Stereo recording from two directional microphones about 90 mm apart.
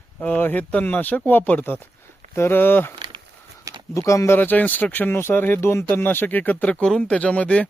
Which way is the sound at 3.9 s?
35° left (ahead or behind).